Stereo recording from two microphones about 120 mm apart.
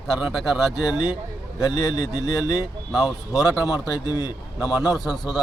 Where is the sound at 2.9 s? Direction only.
Centre (ahead or behind).